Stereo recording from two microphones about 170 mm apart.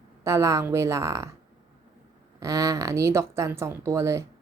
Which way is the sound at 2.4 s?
20° right (ahead or behind).